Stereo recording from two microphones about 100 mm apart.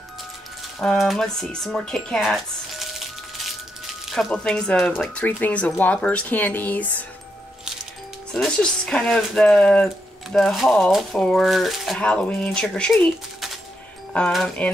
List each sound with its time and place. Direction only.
0.7 s speech: centre (ahead or behind)
4.3 s speech: 10° left (ahead or behind)
8.3 s speech: 5° left (ahead or behind)
12.0 s speech: 10° left (ahead or behind)
14.1 s speech: 10° left (ahead or behind)